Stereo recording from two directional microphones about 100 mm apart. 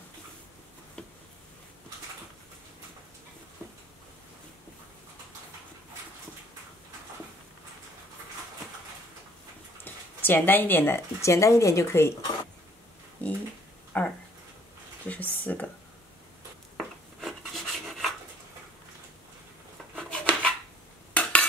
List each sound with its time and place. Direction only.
9.8 s speech: 20° left (ahead or behind)
13.2 s a sound: 15° left (ahead or behind)
16.7 s rub: centre (ahead or behind)
20.0 s dishes: 10° left (ahead or behind)